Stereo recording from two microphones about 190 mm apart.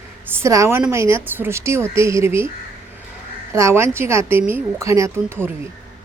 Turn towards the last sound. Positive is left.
turn(degrees=-10)  # may be behind; listen again after turning